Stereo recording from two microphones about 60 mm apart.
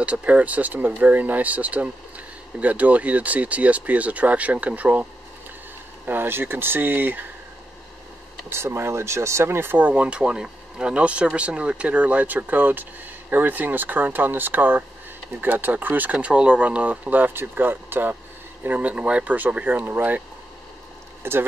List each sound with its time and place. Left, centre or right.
0.0 s speech: right
6.0 s speech: right
8.5 s speech: right
9.8 s speech: right
21.2 s speech: right